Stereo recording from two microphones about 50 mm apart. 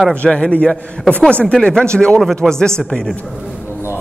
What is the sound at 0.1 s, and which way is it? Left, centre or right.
A man's voice, left.